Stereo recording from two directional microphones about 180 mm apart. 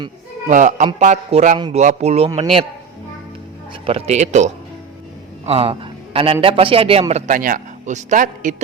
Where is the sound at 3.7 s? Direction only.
30° right (ahead or behind).